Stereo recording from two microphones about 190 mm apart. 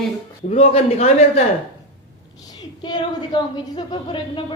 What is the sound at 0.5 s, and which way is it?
Speech, 30° left (ahead or behind).